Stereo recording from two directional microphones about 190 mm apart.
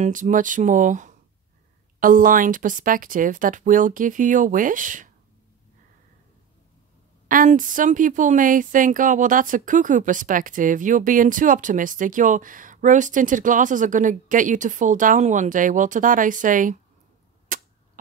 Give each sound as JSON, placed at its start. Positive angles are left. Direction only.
{"t": 0.0, "sound": "speech", "side_deg": -45}
{"t": 7.2, "sound": "speech", "side_deg": -45}
{"t": 17.5, "sound": "cap gun", "side_deg": -45}